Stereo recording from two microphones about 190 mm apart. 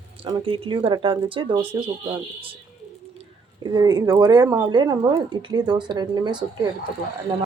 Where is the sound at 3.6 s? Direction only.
25° right (ahead or behind).